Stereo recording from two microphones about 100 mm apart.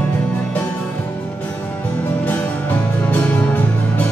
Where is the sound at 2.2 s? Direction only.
15° left (ahead or behind).